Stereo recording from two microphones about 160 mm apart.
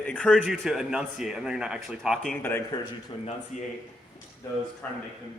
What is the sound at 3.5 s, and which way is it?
Speech, 50° left (ahead or behind).